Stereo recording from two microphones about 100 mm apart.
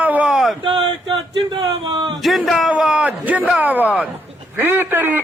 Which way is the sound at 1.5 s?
50° right (ahead or behind).